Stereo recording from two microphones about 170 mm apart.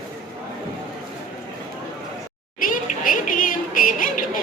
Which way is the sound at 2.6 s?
55° left (ahead or behind).